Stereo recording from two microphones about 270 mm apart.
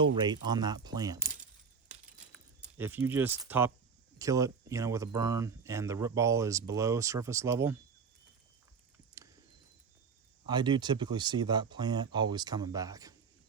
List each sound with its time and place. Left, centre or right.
0.0 s speech: centre
2.7 s speech: centre
10.4 s speech: centre